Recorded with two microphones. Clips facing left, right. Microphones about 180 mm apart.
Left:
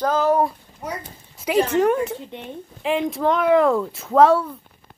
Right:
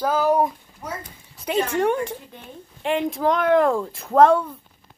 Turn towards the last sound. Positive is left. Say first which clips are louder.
# even
turn(degrees=5)  # may be behind; listen again after turning